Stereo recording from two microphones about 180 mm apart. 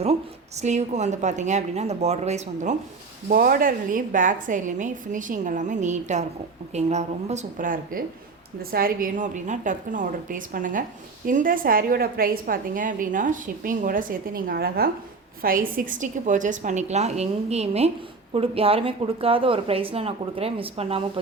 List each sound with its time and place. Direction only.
0.6 s speech: 40° right (ahead or behind)
3.2 s a woman's voice: 55° right (ahead or behind); by 21.1 s 30° right (ahead or behind)